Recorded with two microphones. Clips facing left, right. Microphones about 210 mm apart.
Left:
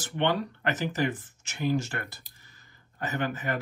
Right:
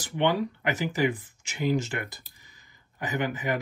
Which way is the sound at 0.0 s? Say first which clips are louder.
Right 2 dB; 10° right (ahead or behind).